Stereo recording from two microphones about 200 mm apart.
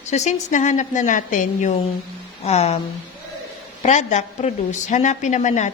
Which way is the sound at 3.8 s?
35° left (ahead or behind).